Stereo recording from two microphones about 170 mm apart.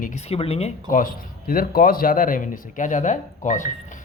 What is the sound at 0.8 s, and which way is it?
Speech, 55° left (ahead or behind).